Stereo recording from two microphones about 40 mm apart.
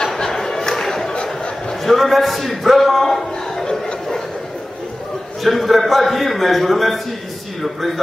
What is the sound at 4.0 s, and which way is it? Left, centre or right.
Chuckle, centre.